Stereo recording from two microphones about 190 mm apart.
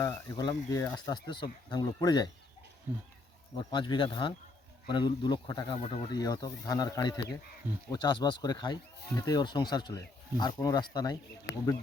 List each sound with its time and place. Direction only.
0.3 s speech: 20° left (ahead or behind)
3.6 s speech: 25° left (ahead or behind)